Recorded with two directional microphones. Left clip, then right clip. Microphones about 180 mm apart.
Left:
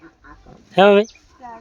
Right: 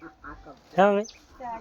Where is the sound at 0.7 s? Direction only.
65° left (ahead or behind).